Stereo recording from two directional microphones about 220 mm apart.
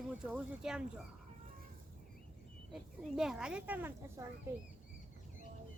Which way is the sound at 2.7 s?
Centre (ahead or behind).